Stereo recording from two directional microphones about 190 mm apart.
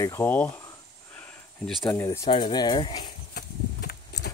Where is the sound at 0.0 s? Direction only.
10° left (ahead or behind).